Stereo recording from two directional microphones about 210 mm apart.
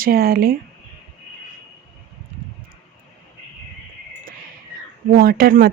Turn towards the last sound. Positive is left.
turn(degrees=-45)  # may be behind; listen again after turning